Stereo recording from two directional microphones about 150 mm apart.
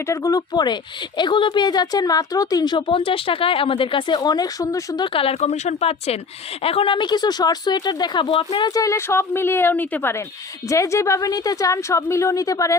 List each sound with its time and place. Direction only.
0.1 s speech: 20° left (ahead or behind)
5.1 s speech: 40° left (ahead or behind); by 12.7 s 20° left (ahead or behind)